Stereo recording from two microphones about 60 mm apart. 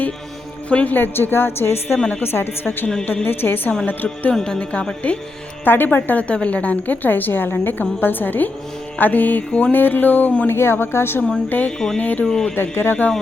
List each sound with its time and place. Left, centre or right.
0.7 s mantra: centre
0.9 s a woman's voice: left
3.8 s mantra: left
4.4 s speech: centre
5.6 s a woman's voice: left
9.0 s mantra: left
9.7 s a woman's voice: left
10.5 s speech: left
11.4 s a woman's voice: left
11.9 s mantra: left
12.2 s speech: centre
12.5 s a woman's voice: left